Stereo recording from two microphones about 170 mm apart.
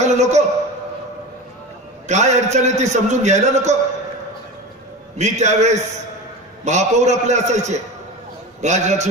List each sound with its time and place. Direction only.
0.0 s a sound: 40° right (ahead or behind)
2.0 s a man's voice: 45° right (ahead or behind)
5.1 s a man's voice: 45° right (ahead or behind)